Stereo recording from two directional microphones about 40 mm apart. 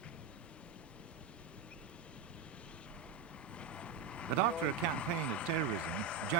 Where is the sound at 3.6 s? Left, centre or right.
Left.